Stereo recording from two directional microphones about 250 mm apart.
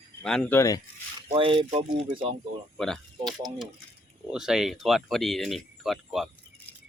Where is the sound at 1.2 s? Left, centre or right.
Right.